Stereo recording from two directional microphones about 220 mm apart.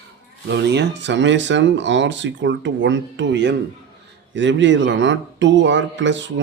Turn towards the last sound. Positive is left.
turn(degrees=-55)  # may be behind; listen again after turning